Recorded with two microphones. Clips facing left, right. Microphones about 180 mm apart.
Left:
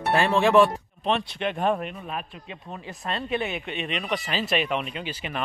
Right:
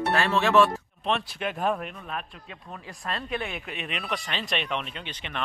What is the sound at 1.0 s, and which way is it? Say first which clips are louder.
Speech: left 3 dB; 5° right (ahead or behind).